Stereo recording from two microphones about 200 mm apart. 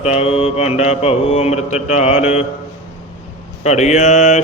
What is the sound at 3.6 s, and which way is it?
Mantra, 35° left (ahead or behind).